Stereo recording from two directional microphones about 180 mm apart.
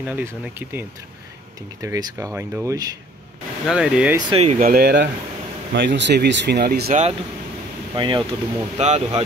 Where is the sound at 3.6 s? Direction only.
5° right (ahead or behind).